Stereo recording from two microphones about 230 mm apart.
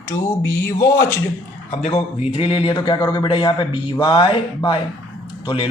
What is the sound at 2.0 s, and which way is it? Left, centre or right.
A man's voice, left.